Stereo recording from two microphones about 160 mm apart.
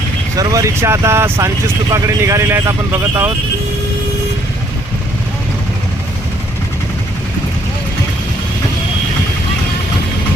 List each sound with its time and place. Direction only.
0.3 s speech: 20° right (ahead or behind)